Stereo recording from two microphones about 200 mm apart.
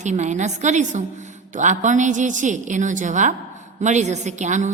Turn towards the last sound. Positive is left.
turn(degrees=-35)  # may be behind; listen again after turning